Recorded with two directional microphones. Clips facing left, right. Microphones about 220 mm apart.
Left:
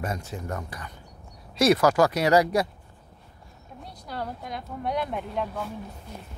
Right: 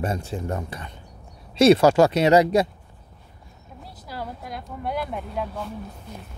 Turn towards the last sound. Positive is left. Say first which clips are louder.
# even
turn(degrees=0)  # may be behind; listen again after turning